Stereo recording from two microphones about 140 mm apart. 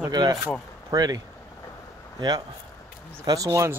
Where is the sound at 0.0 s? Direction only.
25° right (ahead or behind).